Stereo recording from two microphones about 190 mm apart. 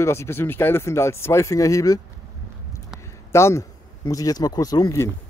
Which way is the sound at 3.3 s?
15° left (ahead or behind).